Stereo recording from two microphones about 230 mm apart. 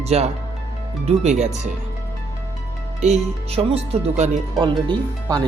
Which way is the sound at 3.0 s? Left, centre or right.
Right.